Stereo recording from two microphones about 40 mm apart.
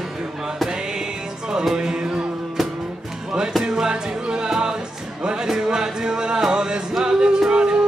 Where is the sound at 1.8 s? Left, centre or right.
Right.